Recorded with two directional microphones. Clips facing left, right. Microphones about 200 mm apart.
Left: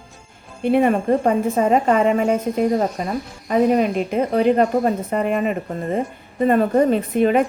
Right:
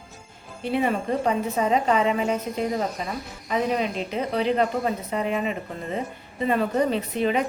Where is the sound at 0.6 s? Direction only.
55° left (ahead or behind).